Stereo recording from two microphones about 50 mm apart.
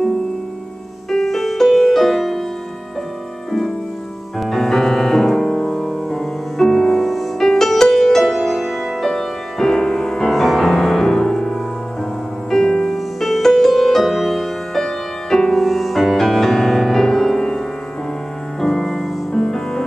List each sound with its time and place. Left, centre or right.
1.1 s music: centre
4.4 s music: centre
9.1 s music: centre